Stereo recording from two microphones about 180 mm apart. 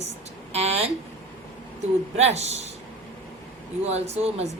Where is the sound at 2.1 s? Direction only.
35° right (ahead or behind).